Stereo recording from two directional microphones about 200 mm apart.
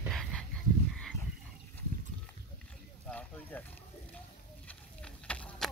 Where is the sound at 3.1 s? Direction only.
5° left (ahead or behind).